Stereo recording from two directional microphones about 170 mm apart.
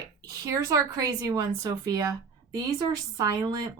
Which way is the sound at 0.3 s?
20° right (ahead or behind).